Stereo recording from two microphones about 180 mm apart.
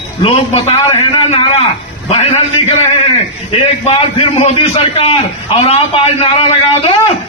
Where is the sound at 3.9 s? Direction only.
35° left (ahead or behind).